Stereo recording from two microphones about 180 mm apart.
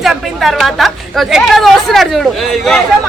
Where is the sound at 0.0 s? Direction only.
Centre (ahead or behind).